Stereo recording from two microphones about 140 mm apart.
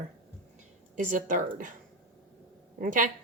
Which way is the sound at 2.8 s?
70° right (ahead or behind).